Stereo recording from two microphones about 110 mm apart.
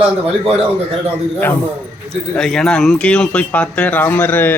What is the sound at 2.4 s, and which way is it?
Speech, 5° left (ahead or behind).